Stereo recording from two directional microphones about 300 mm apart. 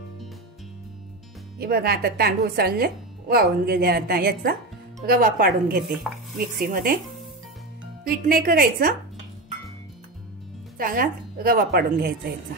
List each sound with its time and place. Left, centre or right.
1.6 s a woman's voice: right
8.1 s a woman's voice: right
10.8 s a woman's voice: right